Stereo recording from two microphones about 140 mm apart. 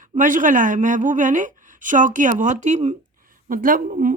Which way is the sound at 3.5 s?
80° right.